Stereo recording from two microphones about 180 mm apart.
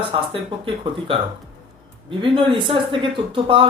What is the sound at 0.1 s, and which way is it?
Speech, 30° right (ahead or behind).